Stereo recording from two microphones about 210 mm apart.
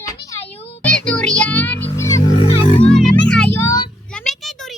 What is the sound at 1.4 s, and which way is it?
Music, 5° left (ahead or behind).